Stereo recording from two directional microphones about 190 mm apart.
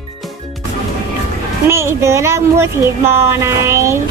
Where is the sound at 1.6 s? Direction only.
15° right (ahead or behind).